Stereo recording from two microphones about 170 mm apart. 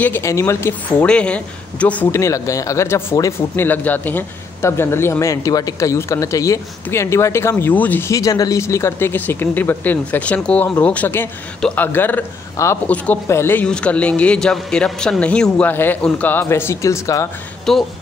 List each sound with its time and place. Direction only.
0.0 s a woman's voice: 15° left (ahead or behind)
17.7 s speech: centre (ahead or behind)